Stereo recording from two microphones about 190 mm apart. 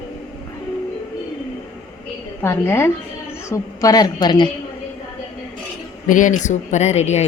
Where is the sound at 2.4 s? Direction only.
10° left (ahead or behind).